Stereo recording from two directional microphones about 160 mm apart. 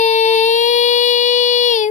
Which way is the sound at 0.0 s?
50° left (ahead or behind).